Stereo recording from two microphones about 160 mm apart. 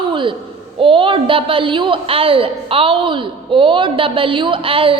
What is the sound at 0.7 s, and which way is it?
A woman's voice, 35° right (ahead or behind).